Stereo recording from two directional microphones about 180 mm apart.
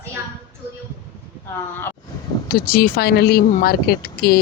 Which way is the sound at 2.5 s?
55° left (ahead or behind).